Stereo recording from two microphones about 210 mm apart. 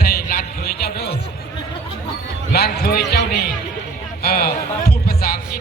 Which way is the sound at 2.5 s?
50° left (ahead or behind).